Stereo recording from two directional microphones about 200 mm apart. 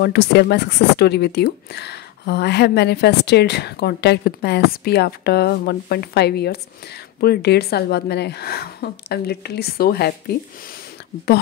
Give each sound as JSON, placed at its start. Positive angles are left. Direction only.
{"t": 0.0, "sound": "a woman's voice", "side_deg": 55}